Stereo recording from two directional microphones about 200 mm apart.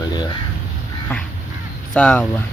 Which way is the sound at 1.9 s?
5° left (ahead or behind).